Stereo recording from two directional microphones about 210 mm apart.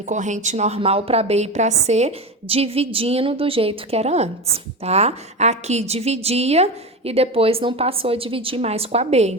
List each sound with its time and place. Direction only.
0.1 s a woman's voice: 35° right (ahead or behind)